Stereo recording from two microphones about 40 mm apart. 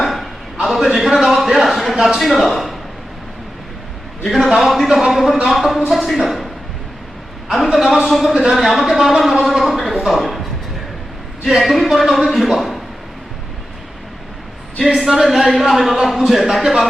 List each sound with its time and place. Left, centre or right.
0.6 s a sound: centre
2.1 s a man's voice: centre
4.2 s a man's voice: centre
9.4 s a sound: centre
11.6 s a man's voice: centre
14.8 s a man's voice: centre